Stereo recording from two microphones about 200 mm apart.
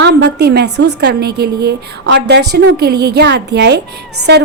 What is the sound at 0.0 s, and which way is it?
Speech, 55° right (ahead or behind).